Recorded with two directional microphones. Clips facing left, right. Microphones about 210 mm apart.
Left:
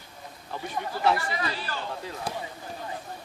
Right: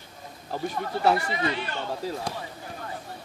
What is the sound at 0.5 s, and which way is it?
Speech, 40° right (ahead or behind).